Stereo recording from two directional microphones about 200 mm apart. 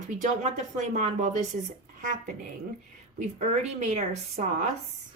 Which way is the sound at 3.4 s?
35° right (ahead or behind).